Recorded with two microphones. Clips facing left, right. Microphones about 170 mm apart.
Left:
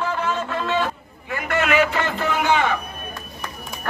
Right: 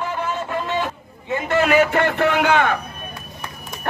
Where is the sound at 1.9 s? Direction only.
60° right (ahead or behind).